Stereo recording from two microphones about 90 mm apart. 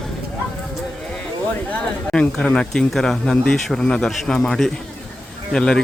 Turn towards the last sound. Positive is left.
turn(degrees=5)  # may be behind; listen again after turning